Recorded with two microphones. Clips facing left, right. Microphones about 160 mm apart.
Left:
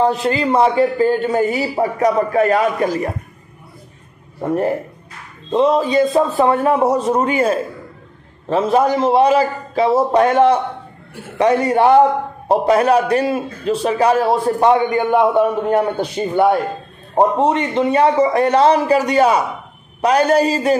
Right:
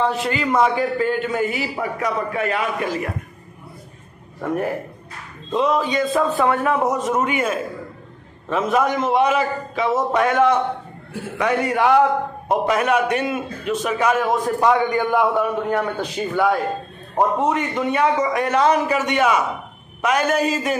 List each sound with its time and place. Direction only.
0.0 s a man's voice: 35° left (ahead or behind)
4.4 s a man's voice: 25° left (ahead or behind)